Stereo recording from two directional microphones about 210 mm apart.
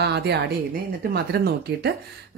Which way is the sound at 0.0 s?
50° right (ahead or behind).